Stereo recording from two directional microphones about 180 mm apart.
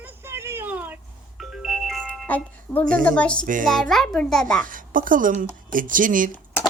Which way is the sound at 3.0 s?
5° left (ahead or behind).